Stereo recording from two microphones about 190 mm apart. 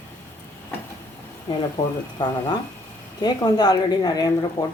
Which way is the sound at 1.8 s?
30° left (ahead or behind).